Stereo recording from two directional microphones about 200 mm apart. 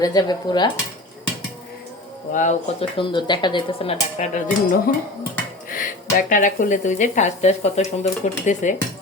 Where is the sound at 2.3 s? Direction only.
40° left (ahead or behind).